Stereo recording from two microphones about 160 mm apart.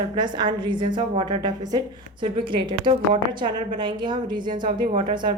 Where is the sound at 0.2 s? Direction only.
30° right (ahead or behind).